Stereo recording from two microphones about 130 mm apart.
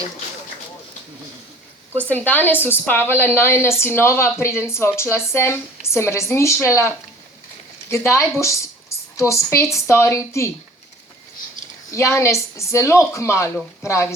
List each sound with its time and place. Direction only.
2.0 s a woman's voice: 15° left (ahead or behind)
11.9 s a woman's voice: 20° left (ahead or behind)